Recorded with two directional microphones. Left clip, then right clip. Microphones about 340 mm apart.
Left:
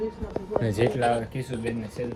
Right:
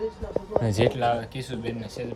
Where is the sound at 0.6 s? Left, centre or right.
Right.